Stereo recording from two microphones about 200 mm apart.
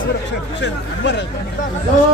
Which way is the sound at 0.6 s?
60° left (ahead or behind).